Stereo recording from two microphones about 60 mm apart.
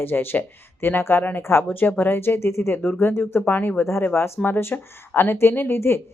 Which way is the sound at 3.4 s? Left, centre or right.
Left.